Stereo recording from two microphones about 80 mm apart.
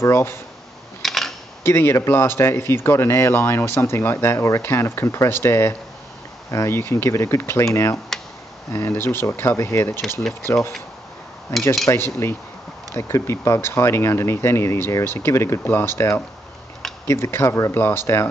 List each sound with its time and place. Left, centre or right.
0.0 s speech: left
1.0 s camera: centre
1.6 s speech: left
8.7 s speech: left
10.3 s speech: centre
11.9 s speech: left
17.1 s speech: left